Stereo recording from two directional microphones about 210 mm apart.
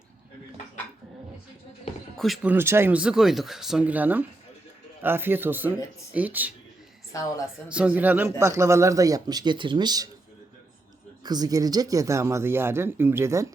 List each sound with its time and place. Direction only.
2.1 s speech: centre (ahead or behind)
7.1 s a woman's voice: 15° left (ahead or behind)
7.7 s speech: 5° right (ahead or behind)
11.2 s speech: 20° right (ahead or behind)